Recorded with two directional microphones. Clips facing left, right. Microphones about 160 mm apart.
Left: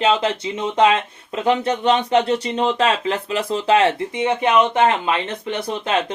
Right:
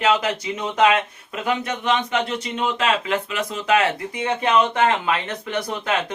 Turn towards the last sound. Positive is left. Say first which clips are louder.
# left 1 dB
turn(degrees=25)  # may be behind; listen again after turning